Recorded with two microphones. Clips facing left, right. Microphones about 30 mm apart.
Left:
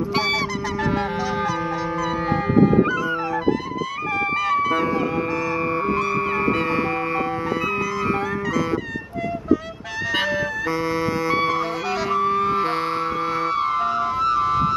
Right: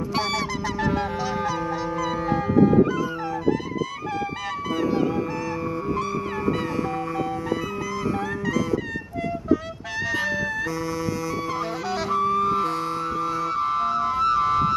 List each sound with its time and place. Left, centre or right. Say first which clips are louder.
4.6 s music: left 3 dB; centre
12.3 s music: left 2 dB; left
13.5 s music: left 2 dB; centre